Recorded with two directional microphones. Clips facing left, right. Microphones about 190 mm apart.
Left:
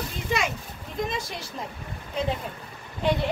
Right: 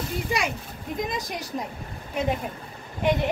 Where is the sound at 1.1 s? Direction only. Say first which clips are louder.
Right 1 dB; 15° right (ahead or behind).